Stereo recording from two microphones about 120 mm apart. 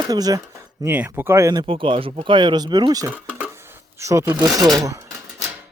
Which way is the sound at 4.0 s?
25° right (ahead or behind).